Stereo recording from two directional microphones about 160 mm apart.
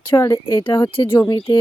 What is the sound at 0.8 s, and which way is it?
Speech, 35° left (ahead or behind).